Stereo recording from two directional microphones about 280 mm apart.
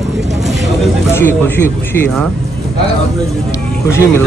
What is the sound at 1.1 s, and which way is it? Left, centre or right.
Speech, centre.